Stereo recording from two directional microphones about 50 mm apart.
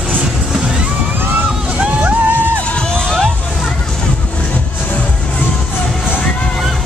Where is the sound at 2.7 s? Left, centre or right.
Centre.